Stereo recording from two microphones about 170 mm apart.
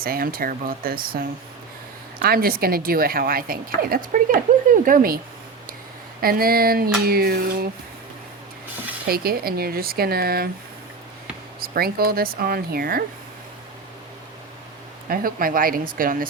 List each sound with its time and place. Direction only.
0.0 s a woman's voice: 60° right (ahead or behind)
6.2 s a woman's voice: 60° right (ahead or behind)
9.0 s a woman's voice: 60° right (ahead or behind)
11.7 s a woman's voice: 60° right (ahead or behind)
15.1 s a woman's voice: 55° right (ahead or behind)